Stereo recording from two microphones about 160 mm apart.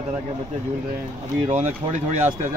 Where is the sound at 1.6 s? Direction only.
50° right (ahead or behind).